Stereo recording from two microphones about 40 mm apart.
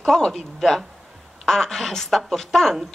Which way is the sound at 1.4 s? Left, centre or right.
Centre.